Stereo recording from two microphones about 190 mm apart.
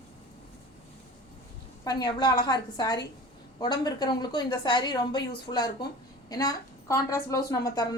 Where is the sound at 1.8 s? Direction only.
20° left (ahead or behind).